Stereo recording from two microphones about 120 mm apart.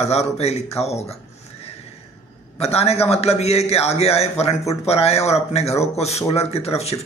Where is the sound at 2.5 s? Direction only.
60° left (ahead or behind).